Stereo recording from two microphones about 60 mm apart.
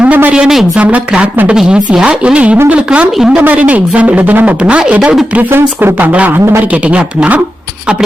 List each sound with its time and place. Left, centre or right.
0.0 s a sound: right
0.3 s speech: centre
0.8 s a woman's voice: right
5.5 s speech: right
6.1 s speech: right